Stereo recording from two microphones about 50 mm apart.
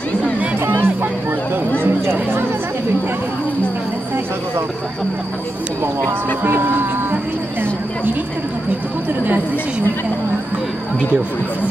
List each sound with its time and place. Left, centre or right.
0.7 s music: right
1.8 s a sound: right
6.0 s speech: right